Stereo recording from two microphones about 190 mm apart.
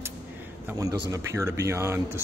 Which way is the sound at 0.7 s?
15° right (ahead or behind).